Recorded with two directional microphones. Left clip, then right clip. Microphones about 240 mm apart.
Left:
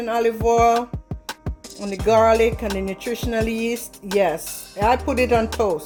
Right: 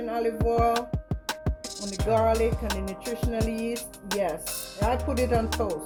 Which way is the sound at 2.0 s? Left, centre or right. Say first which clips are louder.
Left 8 dB; left.